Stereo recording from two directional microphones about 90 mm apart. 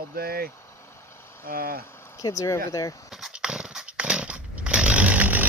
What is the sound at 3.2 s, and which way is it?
Dog, 5° right (ahead or behind).